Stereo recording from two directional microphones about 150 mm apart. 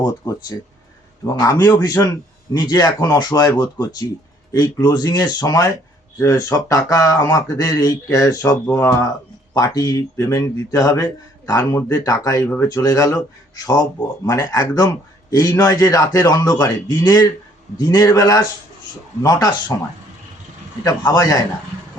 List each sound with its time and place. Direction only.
0.0 s a man's voice: 25° left (ahead or behind)
14.3 s a man's voice: 20° left (ahead or behind)
20.8 s a man's voice: 25° left (ahead or behind)